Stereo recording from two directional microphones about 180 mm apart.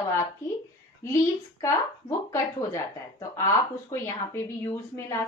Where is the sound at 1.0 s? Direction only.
15° left (ahead or behind).